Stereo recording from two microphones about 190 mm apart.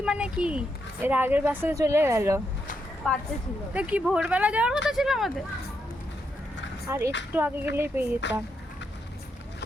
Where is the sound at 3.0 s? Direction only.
5° left (ahead or behind).